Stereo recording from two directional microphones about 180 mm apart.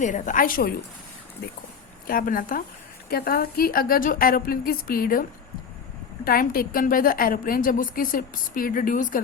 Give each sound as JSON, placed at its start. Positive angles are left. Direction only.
{"t": 0.0, "sound": "a woman's voice", "side_deg": 45}
{"t": 2.0, "sound": "a woman's voice", "side_deg": 50}
{"t": 6.2, "sound": "a woman's voice", "side_deg": 55}